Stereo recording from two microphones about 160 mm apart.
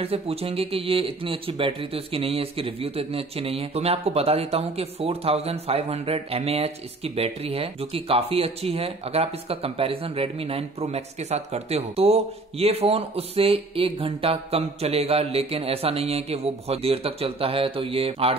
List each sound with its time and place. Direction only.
0.0 s speech: 40° right (ahead or behind)